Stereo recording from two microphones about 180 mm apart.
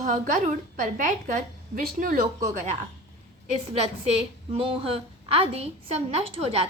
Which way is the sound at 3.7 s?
30° right (ahead or behind).